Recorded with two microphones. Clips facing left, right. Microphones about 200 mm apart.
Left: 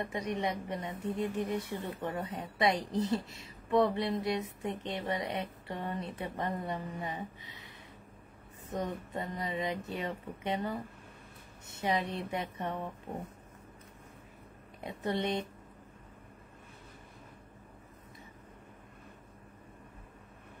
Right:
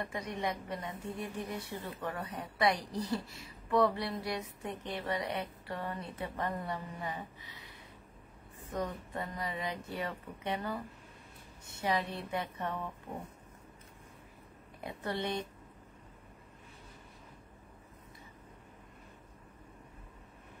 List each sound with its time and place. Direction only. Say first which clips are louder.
0.0 s a woman's voice: left 3 dB; 20° left (ahead or behind)
14.8 s a woman's voice: left 3 dB; 20° left (ahead or behind)